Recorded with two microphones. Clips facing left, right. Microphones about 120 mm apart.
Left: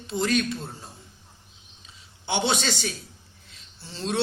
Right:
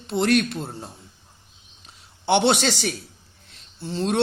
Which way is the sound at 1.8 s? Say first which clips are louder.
Right 10 dB; 60° right (ahead or behind).